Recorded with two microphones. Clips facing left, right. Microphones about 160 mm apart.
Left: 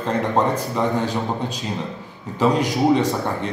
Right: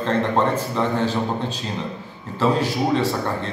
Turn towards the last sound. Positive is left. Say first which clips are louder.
# left 1 dB
turn(degrees=15)  # may be behind; listen again after turning